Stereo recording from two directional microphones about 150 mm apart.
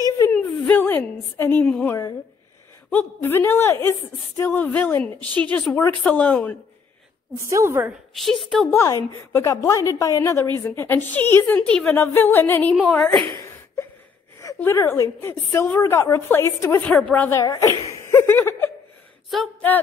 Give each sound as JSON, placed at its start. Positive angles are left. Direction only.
{"t": 0.3, "sound": "a sound", "side_deg": 10}
{"t": 1.9, "sound": "a woman's voice", "side_deg": 20}
{"t": 7.3, "sound": "a woman's voice", "side_deg": -20}
{"t": 8.1, "sound": "a woman's voice", "side_deg": 0}
{"t": 8.6, "sound": "a woman's voice", "side_deg": 20}
{"t": 14.4, "sound": "a woman's voice", "side_deg": 15}
{"t": 17.4, "sound": "a woman's voice", "side_deg": 20}